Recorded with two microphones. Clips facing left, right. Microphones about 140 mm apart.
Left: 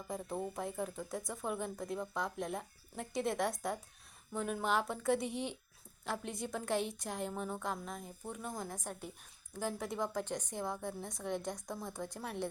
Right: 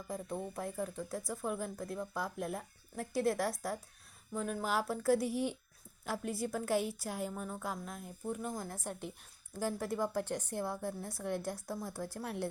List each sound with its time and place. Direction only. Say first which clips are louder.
0.1 s a woman's voice: even; centre (ahead or behind)